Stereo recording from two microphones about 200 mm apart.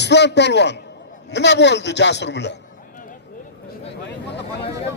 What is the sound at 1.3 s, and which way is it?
A man's voice, 60° left (ahead or behind).